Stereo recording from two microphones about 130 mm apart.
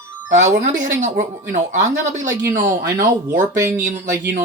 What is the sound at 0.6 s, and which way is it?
Speech, 75° right (ahead or behind).